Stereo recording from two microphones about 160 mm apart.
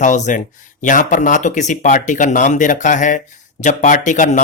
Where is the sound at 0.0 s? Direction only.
50° left (ahead or behind).